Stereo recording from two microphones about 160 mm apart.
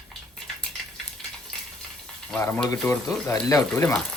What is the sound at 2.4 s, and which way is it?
Speech, 15° left (ahead or behind).